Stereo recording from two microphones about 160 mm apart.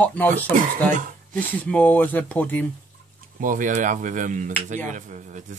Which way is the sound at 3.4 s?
55° right (ahead or behind).